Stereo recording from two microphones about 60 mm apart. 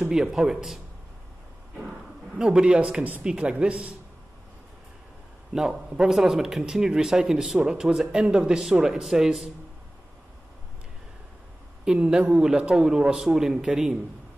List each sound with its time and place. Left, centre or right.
0.1 s speech: centre
2.3 s speech: centre
5.5 s speech: centre
11.8 s speech: centre